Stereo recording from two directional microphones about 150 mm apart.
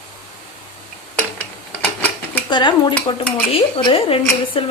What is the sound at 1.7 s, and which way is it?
Dishes, 10° left (ahead or behind).